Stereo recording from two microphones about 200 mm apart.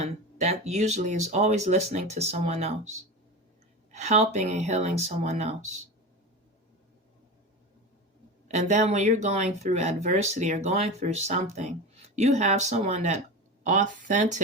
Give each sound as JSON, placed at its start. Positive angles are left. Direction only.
{"t": 0.0, "sound": "speech", "side_deg": -35}
{"t": 3.9, "sound": "speech", "side_deg": -35}
{"t": 8.4, "sound": "speech", "side_deg": -35}